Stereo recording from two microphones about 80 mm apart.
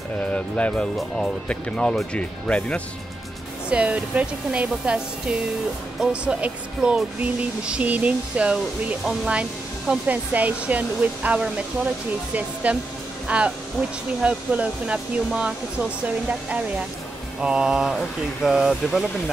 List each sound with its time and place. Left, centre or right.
0.2 s speech: centre
0.9 s speech: centre
3.7 s speech: centre
12.6 s speech: centre